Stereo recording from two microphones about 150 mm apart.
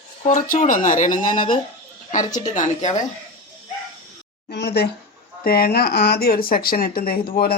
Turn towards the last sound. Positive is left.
turn(degrees=80)